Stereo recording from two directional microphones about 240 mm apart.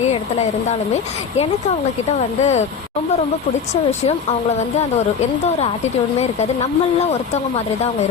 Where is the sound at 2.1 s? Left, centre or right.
Left.